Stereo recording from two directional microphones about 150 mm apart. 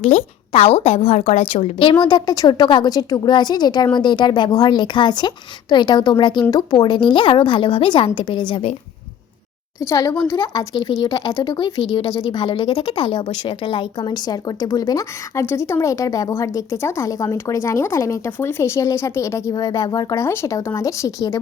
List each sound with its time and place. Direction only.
0.0 s speech: 45° left (ahead or behind)
2.0 s a woman's voice: 25° left (ahead or behind)
9.8 s speech: 20° left (ahead or behind)